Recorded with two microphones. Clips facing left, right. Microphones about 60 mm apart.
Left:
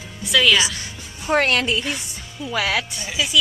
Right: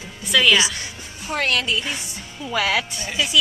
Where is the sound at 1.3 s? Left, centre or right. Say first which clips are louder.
Left 4 dB; left.